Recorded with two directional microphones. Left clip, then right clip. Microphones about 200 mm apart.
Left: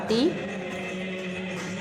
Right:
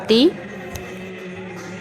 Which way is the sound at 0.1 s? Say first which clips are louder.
Right 10 dB; 35° right (ahead or behind).